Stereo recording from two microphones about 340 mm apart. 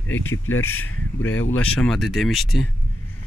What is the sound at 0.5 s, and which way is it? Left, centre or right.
Speech, centre.